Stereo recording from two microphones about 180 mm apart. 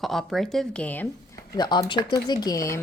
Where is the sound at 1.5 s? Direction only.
25° left (ahead or behind).